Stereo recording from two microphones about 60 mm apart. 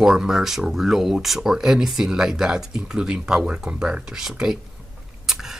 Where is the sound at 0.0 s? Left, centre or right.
Centre.